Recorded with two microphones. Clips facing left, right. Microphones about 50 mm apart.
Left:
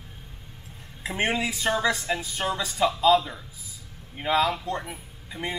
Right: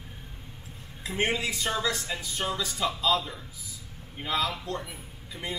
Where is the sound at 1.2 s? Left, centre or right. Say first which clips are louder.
Left 3 dB; left.